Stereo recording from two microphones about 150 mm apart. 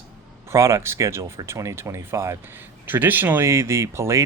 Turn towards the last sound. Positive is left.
turn(degrees=-20)  # may be behind; listen again after turning